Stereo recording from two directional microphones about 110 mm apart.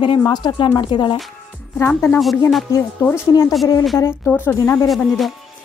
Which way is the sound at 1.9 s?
15° left (ahead or behind).